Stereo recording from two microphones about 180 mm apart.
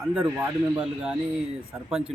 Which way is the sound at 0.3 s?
15° right (ahead or behind).